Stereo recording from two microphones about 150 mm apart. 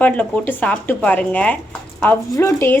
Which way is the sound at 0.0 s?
10° left (ahead or behind).